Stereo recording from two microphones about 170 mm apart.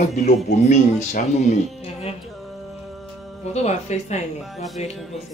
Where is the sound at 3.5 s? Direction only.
40° left (ahead or behind).